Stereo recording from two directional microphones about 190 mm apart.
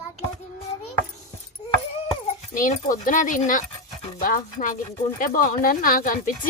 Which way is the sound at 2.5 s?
45° left (ahead or behind).